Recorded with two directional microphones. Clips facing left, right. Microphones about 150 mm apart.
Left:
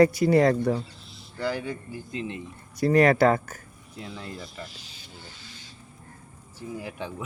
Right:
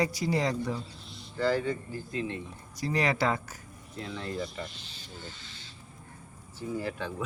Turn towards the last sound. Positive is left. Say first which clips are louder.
# right 1 dB
turn(degrees=15)  # may be behind; listen again after turning